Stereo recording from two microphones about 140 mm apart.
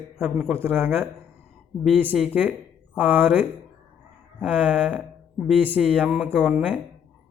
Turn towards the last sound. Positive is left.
turn(degrees=-10)  # may be behind; listen again after turning